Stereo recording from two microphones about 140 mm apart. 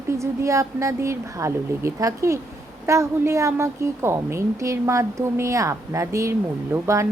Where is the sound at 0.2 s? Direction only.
20° right (ahead or behind).